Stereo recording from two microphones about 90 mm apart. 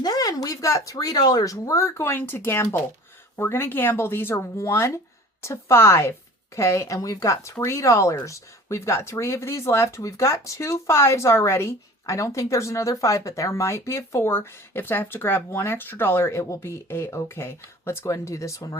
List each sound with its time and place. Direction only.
0.0 s speech: 45° left (ahead or behind)